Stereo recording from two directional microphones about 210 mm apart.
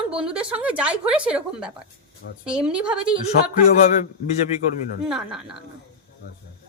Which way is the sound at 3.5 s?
35° left (ahead or behind).